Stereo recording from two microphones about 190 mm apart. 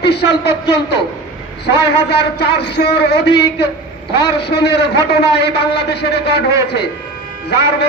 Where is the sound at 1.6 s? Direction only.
60° left (ahead or behind).